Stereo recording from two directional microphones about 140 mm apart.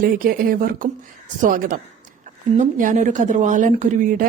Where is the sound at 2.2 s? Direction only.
65° right (ahead or behind).